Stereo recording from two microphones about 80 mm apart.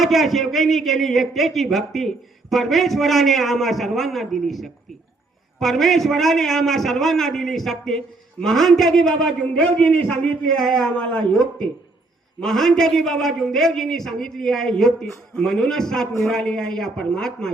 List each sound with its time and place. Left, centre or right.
0.0 s a man's voice: centre